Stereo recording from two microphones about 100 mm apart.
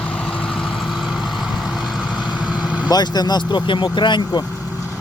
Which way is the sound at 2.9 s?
45° left (ahead or behind).